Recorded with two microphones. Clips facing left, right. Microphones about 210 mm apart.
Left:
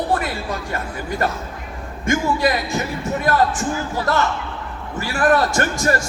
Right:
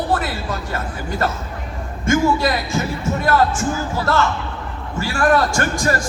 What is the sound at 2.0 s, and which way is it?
A man's voice, 15° left (ahead or behind).